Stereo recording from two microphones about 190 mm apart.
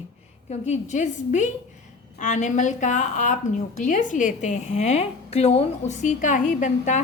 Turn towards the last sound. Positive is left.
turn(degrees=40)  # may be behind; listen again after turning